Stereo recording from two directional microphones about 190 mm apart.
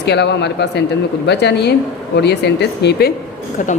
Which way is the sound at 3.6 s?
45° left (ahead or behind).